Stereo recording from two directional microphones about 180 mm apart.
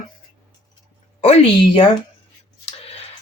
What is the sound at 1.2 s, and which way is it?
A woman's voice, 35° left (ahead or behind).